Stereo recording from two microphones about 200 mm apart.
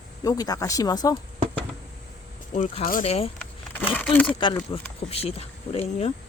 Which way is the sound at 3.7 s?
10° left (ahead or behind).